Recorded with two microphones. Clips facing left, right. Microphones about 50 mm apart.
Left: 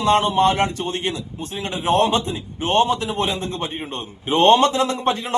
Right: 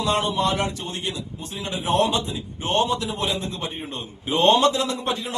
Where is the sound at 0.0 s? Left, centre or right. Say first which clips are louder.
Left 6 dB; left.